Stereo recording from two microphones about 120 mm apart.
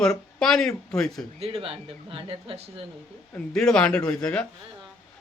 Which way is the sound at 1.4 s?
50° right (ahead or behind).